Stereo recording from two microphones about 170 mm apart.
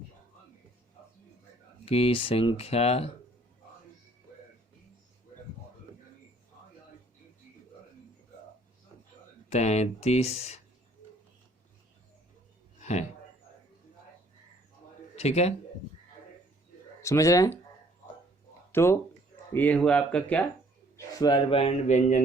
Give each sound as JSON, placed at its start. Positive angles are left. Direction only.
{"t": 1.8, "sound": "a man's voice", "side_deg": 35}
{"t": 9.5, "sound": "a man's voice", "side_deg": 40}
{"t": 12.8, "sound": "a sound", "side_deg": 40}
{"t": 15.1, "sound": "speech", "side_deg": 40}
{"t": 17.0, "sound": "speech", "side_deg": 20}
{"t": 18.7, "sound": "speech", "side_deg": 15}
{"t": 20.9, "sound": "a man's voice", "side_deg": 25}